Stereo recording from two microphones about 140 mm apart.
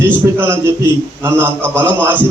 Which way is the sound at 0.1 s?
15° right (ahead or behind).